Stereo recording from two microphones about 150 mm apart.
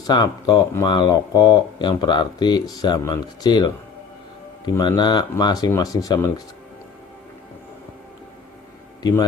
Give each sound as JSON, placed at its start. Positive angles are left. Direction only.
{"t": 0.0, "sound": "speech", "side_deg": 25}
{"t": 4.8, "sound": "speech", "side_deg": 30}